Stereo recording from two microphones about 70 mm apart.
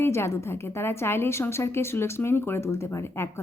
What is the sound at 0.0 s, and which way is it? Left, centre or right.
A woman's voice, left.